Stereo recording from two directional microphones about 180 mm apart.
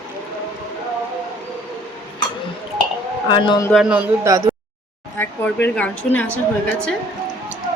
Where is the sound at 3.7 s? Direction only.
Centre (ahead or behind).